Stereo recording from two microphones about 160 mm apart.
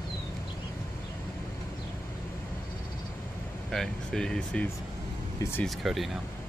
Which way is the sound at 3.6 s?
Centre (ahead or behind).